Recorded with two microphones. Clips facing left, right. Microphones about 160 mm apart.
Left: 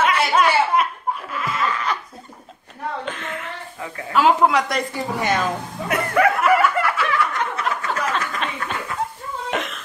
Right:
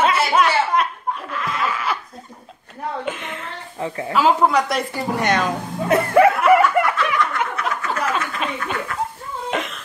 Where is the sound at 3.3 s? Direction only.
30° right (ahead or behind).